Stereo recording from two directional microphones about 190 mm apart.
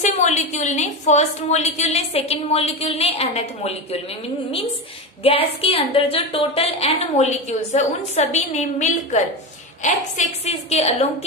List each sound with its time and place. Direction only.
0.0 s a woman's voice: 40° left (ahead or behind)
5.2 s a woman's voice: 30° left (ahead or behind)